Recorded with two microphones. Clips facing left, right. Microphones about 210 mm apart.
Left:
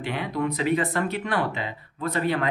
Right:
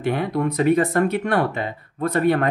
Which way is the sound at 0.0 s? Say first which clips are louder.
Right 5 dB; 50° right (ahead or behind).